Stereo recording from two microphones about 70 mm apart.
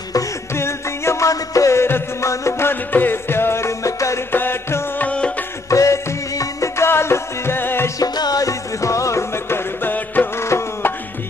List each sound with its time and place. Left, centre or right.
0.6 s music: left
1.3 s music: left
2.7 s music: left
4.3 s music: left
4.9 s music: centre
5.7 s music: left
6.8 s music: left
8.0 s music: left